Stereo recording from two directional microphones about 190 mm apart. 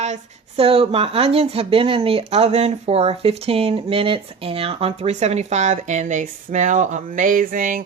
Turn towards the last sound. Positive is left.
turn(degrees=-45)  # may be behind; listen again after turning